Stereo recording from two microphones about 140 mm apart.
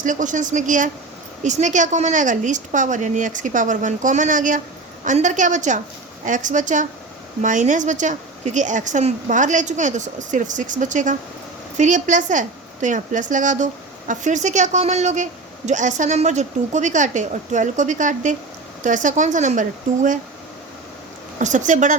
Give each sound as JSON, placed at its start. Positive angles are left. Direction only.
{"t": 0.0, "sound": "a woman's voice", "side_deg": -65}
{"t": 21.3, "sound": "a woman's voice", "side_deg": -60}